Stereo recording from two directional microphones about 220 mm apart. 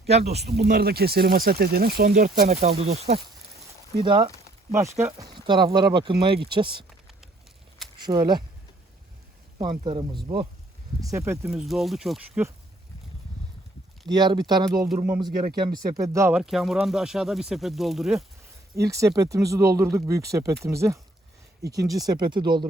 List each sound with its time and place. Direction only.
0.1 s speech: 30° right (ahead or behind)
0.4 s speech: 45° right (ahead or behind); by 6.8 s 20° right (ahead or behind)
7.9 s speech: 20° right (ahead or behind)
9.6 s speech: 20° right (ahead or behind)
11.6 s speech: centre (ahead or behind)
14.1 s speech: 20° right (ahead or behind); by 18.3 s centre (ahead or behind)
18.8 s speech: 15° right (ahead or behind)